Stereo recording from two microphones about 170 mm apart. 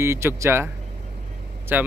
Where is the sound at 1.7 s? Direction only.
10° right (ahead or behind).